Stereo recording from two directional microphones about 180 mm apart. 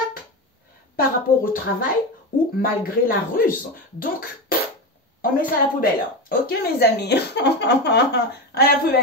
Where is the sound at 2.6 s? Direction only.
55° left (ahead or behind).